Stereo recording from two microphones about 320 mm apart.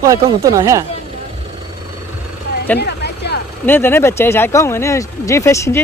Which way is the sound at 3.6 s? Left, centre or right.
Centre.